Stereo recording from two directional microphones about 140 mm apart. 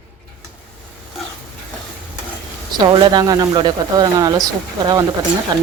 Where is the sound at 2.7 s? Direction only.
30° right (ahead or behind).